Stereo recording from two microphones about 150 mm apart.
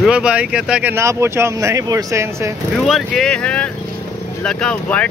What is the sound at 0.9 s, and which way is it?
Speech, 15° right (ahead or behind).